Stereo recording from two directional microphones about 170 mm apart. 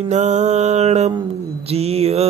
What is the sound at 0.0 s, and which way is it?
Mantra, 40° right (ahead or behind).